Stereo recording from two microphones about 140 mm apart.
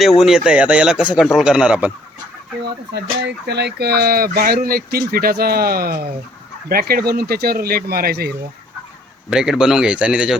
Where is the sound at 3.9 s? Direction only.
90° right.